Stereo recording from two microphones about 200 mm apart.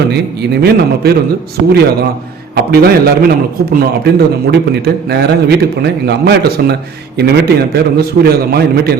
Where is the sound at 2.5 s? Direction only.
50° right (ahead or behind).